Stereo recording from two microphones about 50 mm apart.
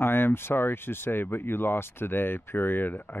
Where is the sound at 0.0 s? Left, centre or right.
Left.